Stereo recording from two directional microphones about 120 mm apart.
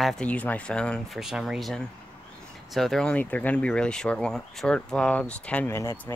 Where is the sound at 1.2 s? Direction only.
5° right (ahead or behind).